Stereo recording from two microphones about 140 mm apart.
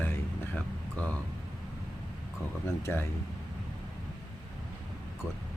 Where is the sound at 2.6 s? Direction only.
20° left (ahead or behind).